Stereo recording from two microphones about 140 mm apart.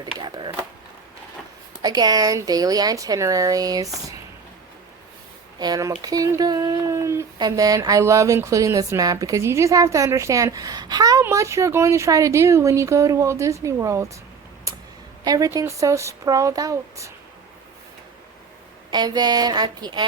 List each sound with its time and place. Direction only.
0.2 s speech: 35° right (ahead or behind)
1.8 s speech: 30° right (ahead or behind)
5.5 s speech: 30° right (ahead or behind)
15.2 s speech: 25° right (ahead or behind)
18.9 s speech: 30° right (ahead or behind)